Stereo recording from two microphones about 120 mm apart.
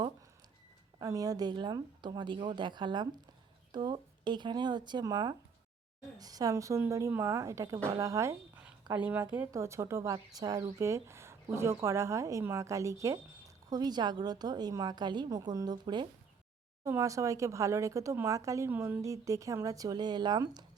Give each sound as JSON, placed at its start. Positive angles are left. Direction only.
{"t": 0.9, "sound": "a woman's voice", "side_deg": -30}
{"t": 9.0, "sound": "speech", "side_deg": -10}
{"t": 9.5, "sound": "a woman's voice", "side_deg": -25}
{"t": 16.8, "sound": "speech", "side_deg": -25}
{"t": 18.7, "sound": "a woman's voice", "side_deg": -15}